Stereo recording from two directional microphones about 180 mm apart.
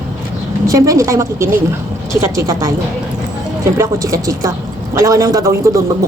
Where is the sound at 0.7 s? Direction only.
20° right (ahead or behind).